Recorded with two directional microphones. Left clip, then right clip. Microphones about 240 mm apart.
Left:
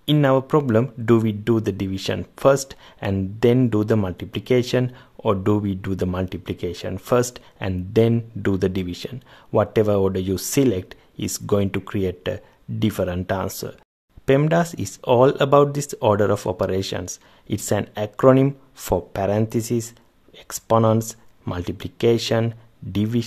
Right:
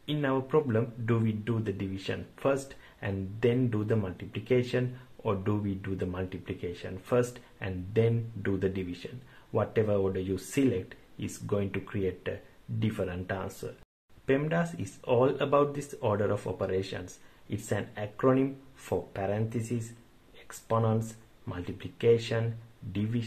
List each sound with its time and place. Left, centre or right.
0.0 s speech: left